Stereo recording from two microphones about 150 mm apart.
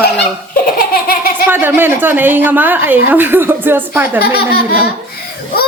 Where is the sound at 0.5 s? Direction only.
75° left (ahead or behind).